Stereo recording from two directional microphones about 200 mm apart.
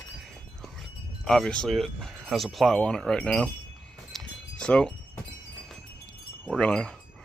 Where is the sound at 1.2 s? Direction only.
Centre (ahead or behind).